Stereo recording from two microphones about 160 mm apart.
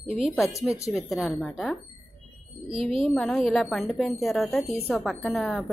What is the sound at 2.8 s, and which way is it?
Speech, centre (ahead or behind).